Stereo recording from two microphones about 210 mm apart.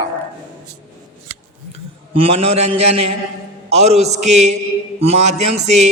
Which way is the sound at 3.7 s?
30° right (ahead or behind).